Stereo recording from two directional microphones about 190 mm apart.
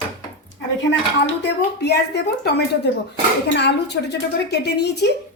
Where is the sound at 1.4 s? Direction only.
60° left (ahead or behind).